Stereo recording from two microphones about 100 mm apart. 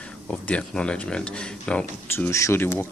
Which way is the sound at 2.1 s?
25° left (ahead or behind).